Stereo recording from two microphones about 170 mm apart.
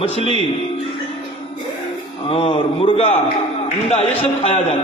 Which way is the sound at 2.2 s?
35° left (ahead or behind).